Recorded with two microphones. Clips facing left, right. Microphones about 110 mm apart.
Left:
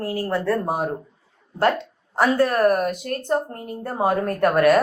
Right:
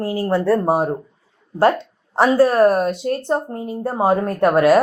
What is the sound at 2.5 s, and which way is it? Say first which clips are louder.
Speech: right 4 dB; 25° right (ahead or behind).